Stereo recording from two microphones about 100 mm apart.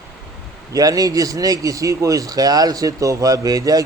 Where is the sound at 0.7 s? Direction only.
35° right (ahead or behind).